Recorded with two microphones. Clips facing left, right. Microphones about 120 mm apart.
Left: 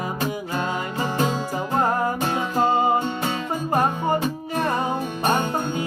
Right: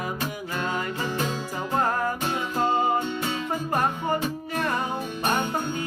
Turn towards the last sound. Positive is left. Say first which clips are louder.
# left 4 dB
turn(degrees=25)  # may be behind; listen again after turning